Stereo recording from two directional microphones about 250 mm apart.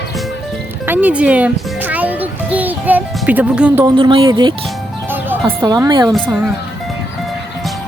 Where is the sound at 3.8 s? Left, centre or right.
Centre.